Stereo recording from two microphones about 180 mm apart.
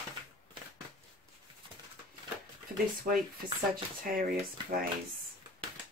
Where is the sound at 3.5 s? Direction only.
55° right (ahead or behind).